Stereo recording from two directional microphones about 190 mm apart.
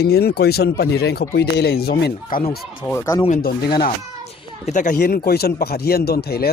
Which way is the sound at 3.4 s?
50° left (ahead or behind).